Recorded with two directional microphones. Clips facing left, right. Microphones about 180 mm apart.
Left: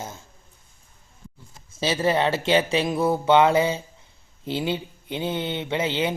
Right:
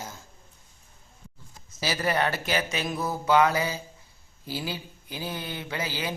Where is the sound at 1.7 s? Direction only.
25° left (ahead or behind).